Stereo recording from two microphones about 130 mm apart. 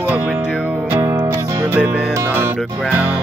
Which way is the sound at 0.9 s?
25° right (ahead or behind).